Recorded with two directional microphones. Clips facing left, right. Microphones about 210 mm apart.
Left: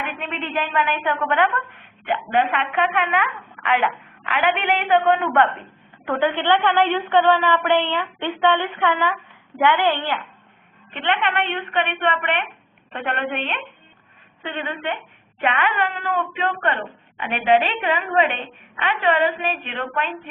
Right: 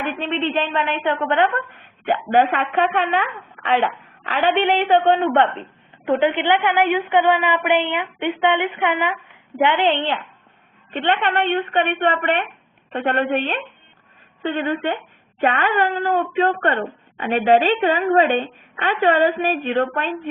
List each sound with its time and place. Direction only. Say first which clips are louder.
0.0 s a woman's voice: right 6 dB; 35° right (ahead or behind)
2.0 s a woman's voice: right 4 dB; 40° right (ahead or behind)
4.3 s a woman's voice: right 3 dB; 35° right (ahead or behind)
10.9 s a woman's voice: right 3 dB; 35° right (ahead or behind)